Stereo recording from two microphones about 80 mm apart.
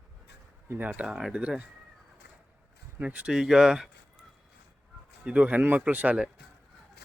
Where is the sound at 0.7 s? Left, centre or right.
Right.